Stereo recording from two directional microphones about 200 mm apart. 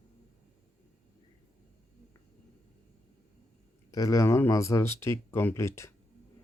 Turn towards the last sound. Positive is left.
turn(degrees=15)  # may be behind; listen again after turning